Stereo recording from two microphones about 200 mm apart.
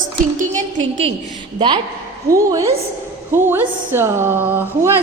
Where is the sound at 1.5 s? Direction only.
25° right (ahead or behind).